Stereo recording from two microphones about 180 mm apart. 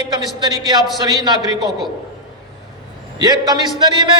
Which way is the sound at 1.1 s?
25° right (ahead or behind).